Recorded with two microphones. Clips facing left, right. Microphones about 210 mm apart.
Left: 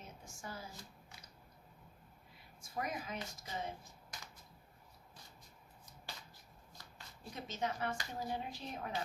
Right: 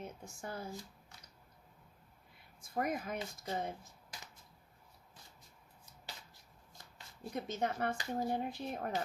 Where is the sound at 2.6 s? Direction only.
55° right (ahead or behind).